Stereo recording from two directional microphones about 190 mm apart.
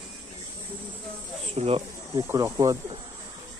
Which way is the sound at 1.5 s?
30° right (ahead or behind).